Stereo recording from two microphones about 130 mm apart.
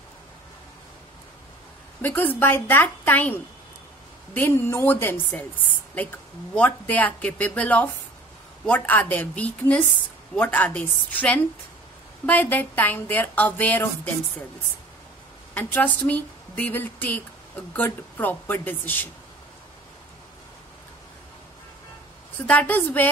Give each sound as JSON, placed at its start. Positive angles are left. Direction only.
{"t": 2.0, "sound": "a woman's voice", "side_deg": 15}
{"t": 6.5, "sound": "a woman's voice", "side_deg": 10}
{"t": 15.5, "sound": "a woman's voice", "side_deg": 10}
{"t": 22.5, "sound": "a woman's voice", "side_deg": 15}